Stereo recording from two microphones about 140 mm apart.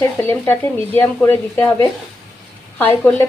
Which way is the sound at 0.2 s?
15° left (ahead or behind).